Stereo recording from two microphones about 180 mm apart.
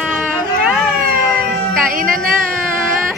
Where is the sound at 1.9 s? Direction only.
50° right (ahead or behind).